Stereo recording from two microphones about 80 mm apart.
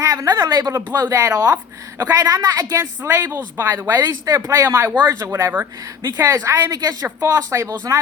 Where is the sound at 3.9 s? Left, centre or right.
Right.